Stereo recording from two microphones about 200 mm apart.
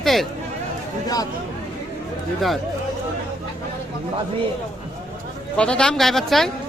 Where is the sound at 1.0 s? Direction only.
20° left (ahead or behind).